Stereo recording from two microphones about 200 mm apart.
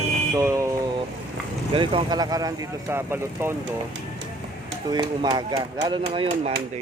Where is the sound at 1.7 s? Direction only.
25° right (ahead or behind).